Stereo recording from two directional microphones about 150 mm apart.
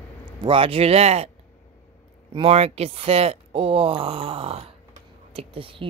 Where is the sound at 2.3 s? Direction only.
40° right (ahead or behind).